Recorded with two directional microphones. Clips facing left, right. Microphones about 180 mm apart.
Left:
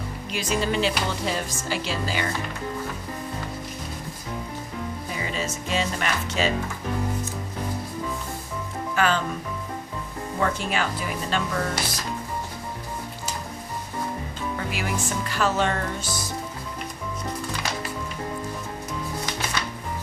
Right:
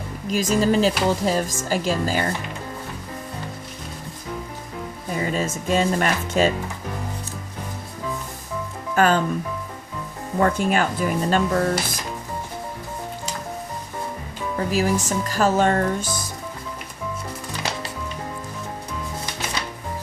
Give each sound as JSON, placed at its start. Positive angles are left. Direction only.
{"t": 0.3, "sound": "speech", "side_deg": -40}
{"t": 5.1, "sound": "music", "side_deg": -45}
{"t": 5.6, "sound": "speech", "side_deg": -45}
{"t": 9.0, "sound": "speech", "side_deg": -45}
{"t": 10.4, "sound": "speech", "side_deg": -45}
{"t": 14.7, "sound": "speech", "side_deg": -35}